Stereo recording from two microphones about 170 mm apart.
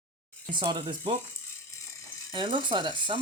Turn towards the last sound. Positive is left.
turn(degrees=-30)  # may be behind; listen again after turning